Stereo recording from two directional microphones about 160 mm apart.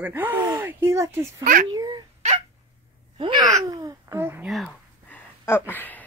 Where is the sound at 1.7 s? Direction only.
25° right (ahead or behind).